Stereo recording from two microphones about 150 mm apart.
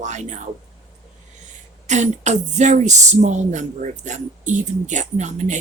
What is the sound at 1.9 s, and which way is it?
Speech, 50° right (ahead or behind).